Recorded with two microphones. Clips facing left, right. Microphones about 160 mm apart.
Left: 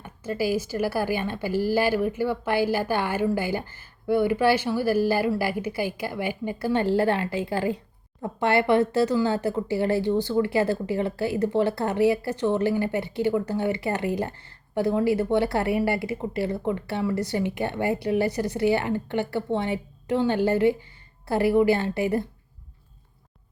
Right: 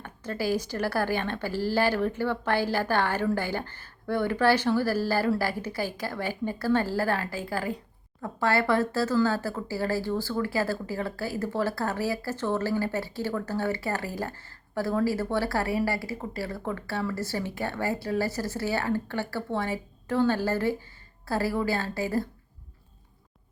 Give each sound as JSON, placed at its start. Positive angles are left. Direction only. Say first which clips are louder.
{"t": 0.0, "sound": "speech", "louder": "left 4 dB", "side_deg": 10}